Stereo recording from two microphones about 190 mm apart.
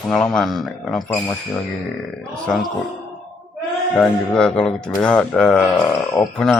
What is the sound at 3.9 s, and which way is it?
Speech, 5° left (ahead or behind).